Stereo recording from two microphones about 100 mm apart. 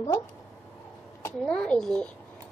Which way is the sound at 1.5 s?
10° left (ahead or behind).